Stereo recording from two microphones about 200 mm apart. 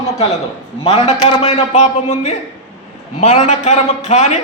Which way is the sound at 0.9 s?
30° left (ahead or behind).